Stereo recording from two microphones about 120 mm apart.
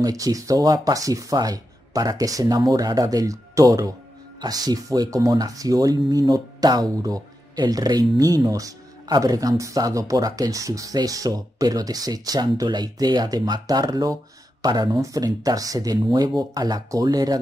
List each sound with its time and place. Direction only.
0.0 s speech: 30° right (ahead or behind)